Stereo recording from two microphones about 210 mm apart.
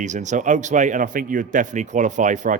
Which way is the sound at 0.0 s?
35° right (ahead or behind).